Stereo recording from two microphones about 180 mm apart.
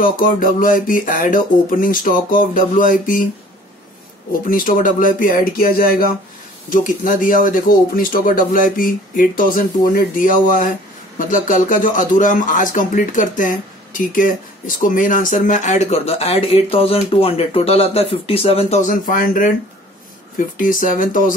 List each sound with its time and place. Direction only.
0.0 s speech: 50° left (ahead or behind)
4.3 s speech: 50° left (ahead or behind)